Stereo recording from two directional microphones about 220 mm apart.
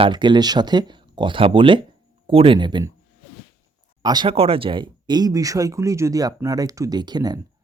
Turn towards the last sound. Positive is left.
turn(degrees=-20)  # may be behind; listen again after turning